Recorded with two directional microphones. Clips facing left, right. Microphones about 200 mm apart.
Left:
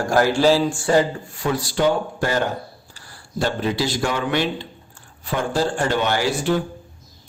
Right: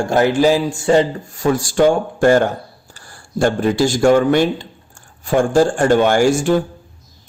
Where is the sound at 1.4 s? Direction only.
45° right (ahead or behind).